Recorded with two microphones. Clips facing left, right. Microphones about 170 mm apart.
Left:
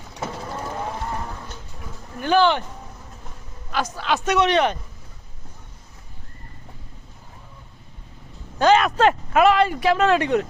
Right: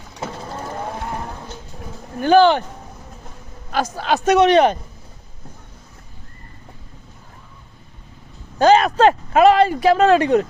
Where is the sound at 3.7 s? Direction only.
40° right (ahead or behind).